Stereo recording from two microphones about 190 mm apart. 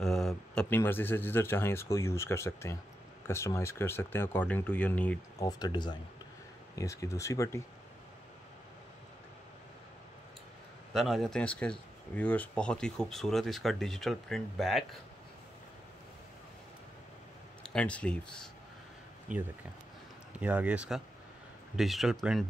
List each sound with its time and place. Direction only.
0.0 s speech: 5° left (ahead or behind)
5.4 s speech: 20° left (ahead or behind)
10.9 s speech: centre (ahead or behind)
17.6 s speech: 5° left (ahead or behind)
19.3 s speech: 45° right (ahead or behind)
20.3 s speech: 10° right (ahead or behind)